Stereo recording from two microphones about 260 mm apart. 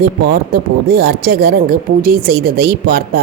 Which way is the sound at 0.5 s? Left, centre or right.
Right.